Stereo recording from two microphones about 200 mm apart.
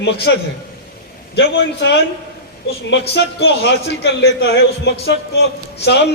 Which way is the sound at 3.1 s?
55° left (ahead or behind).